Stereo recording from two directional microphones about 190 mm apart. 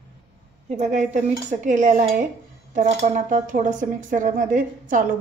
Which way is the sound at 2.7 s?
40° right (ahead or behind).